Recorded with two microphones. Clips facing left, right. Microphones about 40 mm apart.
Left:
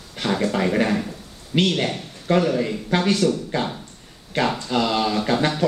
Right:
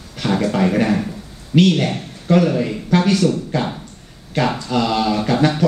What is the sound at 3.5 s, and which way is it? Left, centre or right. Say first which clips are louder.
Speech: right 3 dB; left.